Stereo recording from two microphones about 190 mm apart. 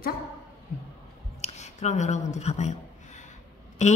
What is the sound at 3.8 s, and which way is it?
Speech, 40° left (ahead or behind).